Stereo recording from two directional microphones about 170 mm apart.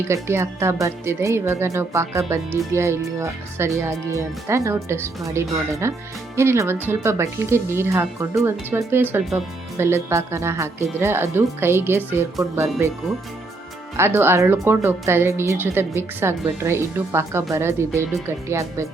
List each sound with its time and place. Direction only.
0.1 s speech: 15° right (ahead or behind)
13.9 s speech: 15° right (ahead or behind)